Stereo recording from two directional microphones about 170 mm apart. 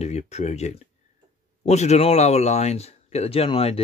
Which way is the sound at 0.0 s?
40° left (ahead or behind).